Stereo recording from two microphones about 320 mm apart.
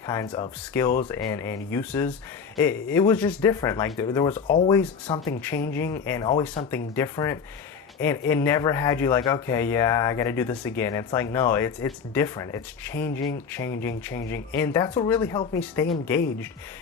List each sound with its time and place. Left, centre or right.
0.0 s speech: centre
4.4 s speech: centre
4.7 s speech: centre
13.1 s music: left
13.5 s speech: centre